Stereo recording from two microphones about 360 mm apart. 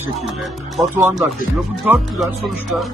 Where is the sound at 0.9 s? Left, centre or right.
Centre.